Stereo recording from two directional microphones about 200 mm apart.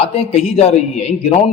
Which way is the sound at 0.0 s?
30° left (ahead or behind).